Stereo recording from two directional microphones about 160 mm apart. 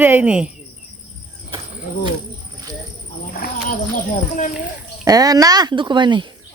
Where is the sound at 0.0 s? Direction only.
10° right (ahead or behind).